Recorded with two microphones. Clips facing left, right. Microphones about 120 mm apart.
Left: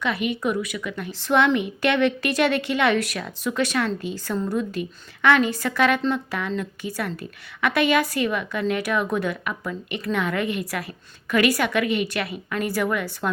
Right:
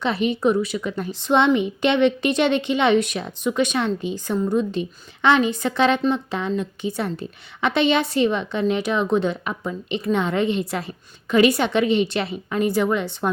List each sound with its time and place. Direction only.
0.0 s speech: 30° right (ahead or behind)
1.1 s a woman's voice: 20° right (ahead or behind)